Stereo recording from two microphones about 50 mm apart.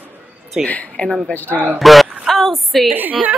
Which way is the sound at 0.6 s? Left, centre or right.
Left.